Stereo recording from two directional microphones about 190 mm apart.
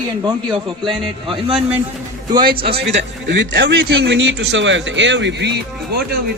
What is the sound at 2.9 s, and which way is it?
A man's voice, 70° right (ahead or behind).